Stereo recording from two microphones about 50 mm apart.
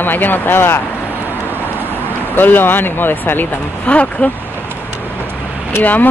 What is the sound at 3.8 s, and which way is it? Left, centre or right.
Speech, left.